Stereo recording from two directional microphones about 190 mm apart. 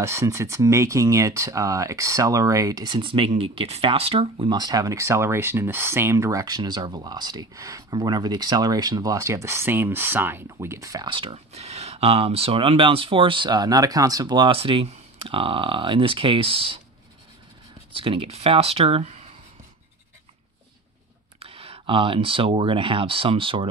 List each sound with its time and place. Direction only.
0.0 s speech: 15° right (ahead or behind)
17.9 s speech: 30° right (ahead or behind)
21.4 s speech: 30° right (ahead or behind)